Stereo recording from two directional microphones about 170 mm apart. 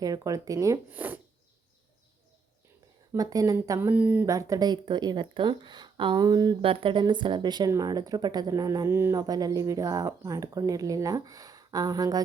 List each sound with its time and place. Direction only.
0.0 s speech: 20° right (ahead or behind)
3.1 s speech: 20° right (ahead or behind)